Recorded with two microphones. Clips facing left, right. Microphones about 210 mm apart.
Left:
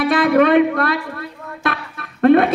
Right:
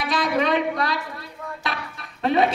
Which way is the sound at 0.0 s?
60° left (ahead or behind).